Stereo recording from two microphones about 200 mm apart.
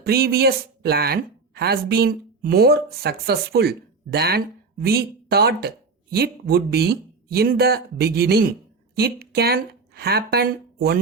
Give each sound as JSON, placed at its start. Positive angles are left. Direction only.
{"t": 0.0, "sound": "speech", "side_deg": -50}